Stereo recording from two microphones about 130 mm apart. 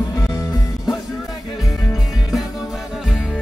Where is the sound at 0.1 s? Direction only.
25° left (ahead or behind).